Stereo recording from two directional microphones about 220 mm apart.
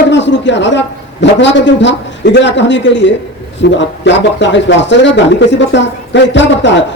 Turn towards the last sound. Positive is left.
turn(degrees=55)  # may be behind; listen again after turning